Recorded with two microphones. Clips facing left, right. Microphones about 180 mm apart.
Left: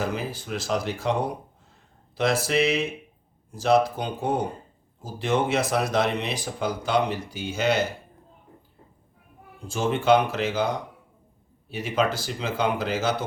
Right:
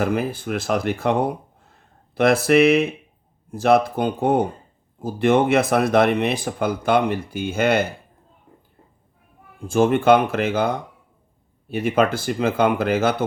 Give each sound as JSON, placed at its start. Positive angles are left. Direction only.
{"t": 0.0, "sound": "speech", "side_deg": -55}
{"t": 2.1, "sound": "speech", "side_deg": -55}
{"t": 9.6, "sound": "speech", "side_deg": -55}